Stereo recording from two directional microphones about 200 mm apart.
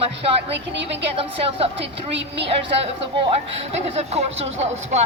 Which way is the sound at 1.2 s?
30° right (ahead or behind).